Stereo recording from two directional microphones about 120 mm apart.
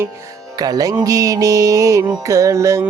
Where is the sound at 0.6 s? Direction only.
30° right (ahead or behind).